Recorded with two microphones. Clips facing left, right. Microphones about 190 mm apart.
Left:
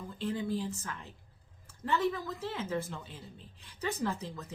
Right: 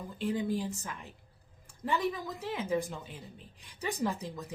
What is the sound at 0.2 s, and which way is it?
A woman's voice, 15° right (ahead or behind).